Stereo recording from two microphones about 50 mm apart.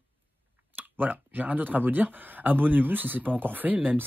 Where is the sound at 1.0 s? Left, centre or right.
Right.